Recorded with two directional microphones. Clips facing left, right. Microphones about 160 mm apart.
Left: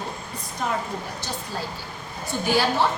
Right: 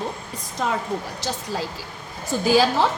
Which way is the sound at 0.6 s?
90° right.